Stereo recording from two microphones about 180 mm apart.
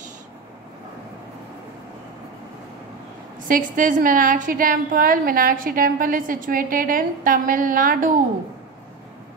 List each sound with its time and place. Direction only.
3.4 s a woman's voice: 50° right (ahead or behind)